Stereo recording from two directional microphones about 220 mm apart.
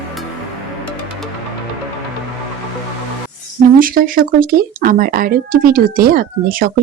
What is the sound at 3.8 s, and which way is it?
Speech, 40° right (ahead or behind).